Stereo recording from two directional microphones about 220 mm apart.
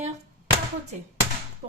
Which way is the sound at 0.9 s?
35° right (ahead or behind).